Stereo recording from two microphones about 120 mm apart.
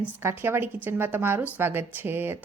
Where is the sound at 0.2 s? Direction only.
20° right (ahead or behind).